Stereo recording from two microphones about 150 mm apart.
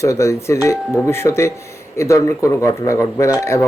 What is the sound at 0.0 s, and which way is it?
Speech, 20° left (ahead or behind).